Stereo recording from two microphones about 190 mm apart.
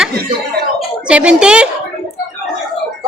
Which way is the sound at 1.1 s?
5° right (ahead or behind).